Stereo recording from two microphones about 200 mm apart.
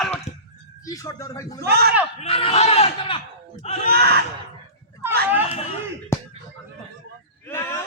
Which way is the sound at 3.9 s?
50° right (ahead or behind).